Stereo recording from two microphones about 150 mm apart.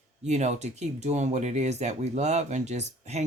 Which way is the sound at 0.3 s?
50° right (ahead or behind).